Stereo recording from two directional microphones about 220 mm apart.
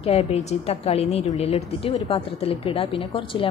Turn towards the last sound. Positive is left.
turn(degrees=25)  # may be behind; listen again after turning